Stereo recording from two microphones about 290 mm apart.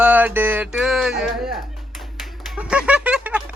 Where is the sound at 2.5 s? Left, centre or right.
Centre.